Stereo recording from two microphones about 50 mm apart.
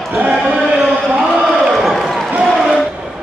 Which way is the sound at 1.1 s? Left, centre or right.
Centre.